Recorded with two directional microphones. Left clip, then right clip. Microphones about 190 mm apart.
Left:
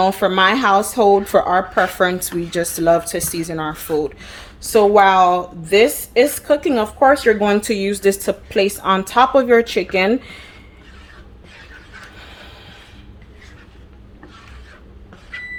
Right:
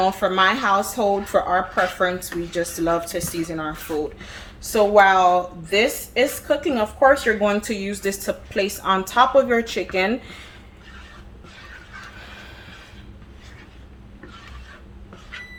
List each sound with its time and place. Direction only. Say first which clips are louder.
0.0 s a woman's voice: left 4 dB; 50° left (ahead or behind)